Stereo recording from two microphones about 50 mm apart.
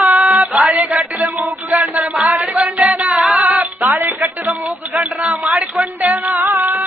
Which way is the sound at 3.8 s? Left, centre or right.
Right.